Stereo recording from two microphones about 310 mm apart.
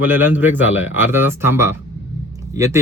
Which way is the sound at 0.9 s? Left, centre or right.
Centre.